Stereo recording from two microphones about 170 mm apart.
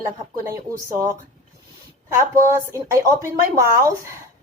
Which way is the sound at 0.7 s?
20° right (ahead or behind).